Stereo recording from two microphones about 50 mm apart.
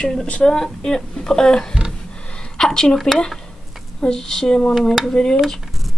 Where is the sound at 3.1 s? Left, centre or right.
Centre.